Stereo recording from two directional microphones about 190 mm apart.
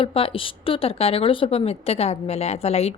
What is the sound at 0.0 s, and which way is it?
A woman's voice, 30° left (ahead or behind).